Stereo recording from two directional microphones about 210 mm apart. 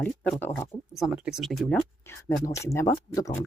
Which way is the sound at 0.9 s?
Centre (ahead or behind).